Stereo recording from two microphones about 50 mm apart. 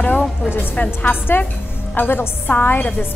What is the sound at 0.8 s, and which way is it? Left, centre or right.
Speech, left.